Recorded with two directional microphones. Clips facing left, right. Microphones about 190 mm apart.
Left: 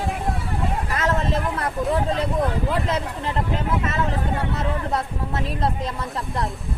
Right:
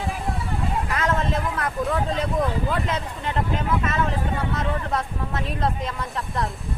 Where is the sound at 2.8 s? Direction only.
35° left (ahead or behind).